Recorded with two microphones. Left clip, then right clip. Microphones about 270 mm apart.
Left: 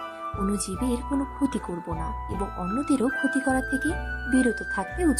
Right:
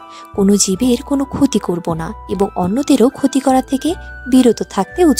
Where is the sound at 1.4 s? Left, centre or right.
Right.